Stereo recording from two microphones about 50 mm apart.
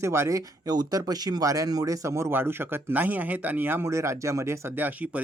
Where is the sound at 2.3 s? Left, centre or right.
Right.